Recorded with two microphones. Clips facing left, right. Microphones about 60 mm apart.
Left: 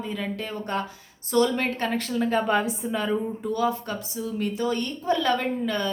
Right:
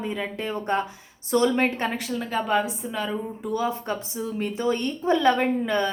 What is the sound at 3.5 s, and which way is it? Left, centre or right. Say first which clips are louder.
Speech: even; right.